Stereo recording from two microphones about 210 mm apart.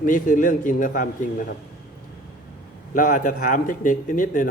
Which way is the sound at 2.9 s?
40° left (ahead or behind).